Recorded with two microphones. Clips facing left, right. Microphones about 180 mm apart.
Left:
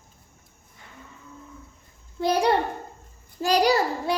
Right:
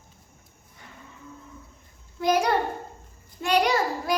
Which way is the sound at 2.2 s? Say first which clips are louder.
Left 1 dB; 30° left (ahead or behind).